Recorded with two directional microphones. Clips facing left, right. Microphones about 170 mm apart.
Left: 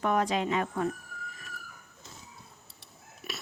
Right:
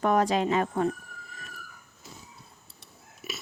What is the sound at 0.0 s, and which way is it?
Speech, 40° right (ahead or behind).